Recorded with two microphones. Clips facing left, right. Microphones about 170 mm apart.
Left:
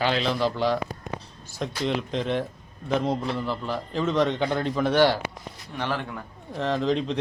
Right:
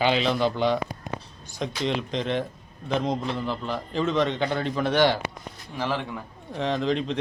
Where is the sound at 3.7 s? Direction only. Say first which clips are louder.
Right 1 dB; 10° left (ahead or behind).